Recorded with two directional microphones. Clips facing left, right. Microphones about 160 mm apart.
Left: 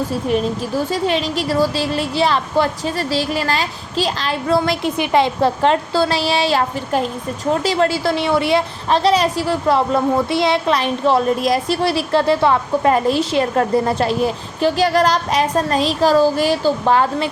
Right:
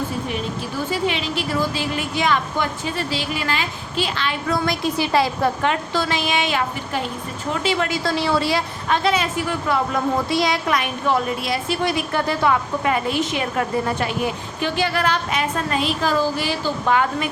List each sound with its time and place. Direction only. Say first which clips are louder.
0.9 s a woman's voice: left 1 dB; 40° left (ahead or behind)
11.3 s a woman's voice: left 7 dB; 40° left (ahead or behind)